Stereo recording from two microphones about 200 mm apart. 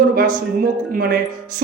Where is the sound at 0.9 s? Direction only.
45° right (ahead or behind).